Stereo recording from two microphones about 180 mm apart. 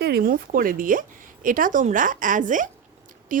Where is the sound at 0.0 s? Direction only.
55° right (ahead or behind).